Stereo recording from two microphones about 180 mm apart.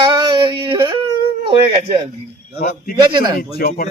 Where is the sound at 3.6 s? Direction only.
55° left (ahead or behind).